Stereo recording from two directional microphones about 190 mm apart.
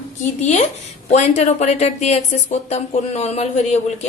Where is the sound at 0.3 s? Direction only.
35° left (ahead or behind).